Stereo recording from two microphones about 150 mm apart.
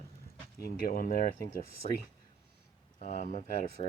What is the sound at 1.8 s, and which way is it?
Speech, 45° left (ahead or behind).